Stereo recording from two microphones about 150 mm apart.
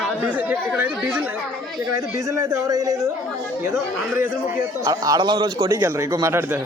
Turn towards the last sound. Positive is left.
turn(degrees=-15)  # may be behind; listen again after turning